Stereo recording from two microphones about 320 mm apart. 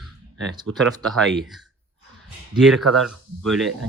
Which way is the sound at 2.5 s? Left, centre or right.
Centre.